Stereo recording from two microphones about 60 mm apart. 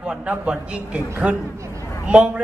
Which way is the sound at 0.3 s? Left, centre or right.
Right.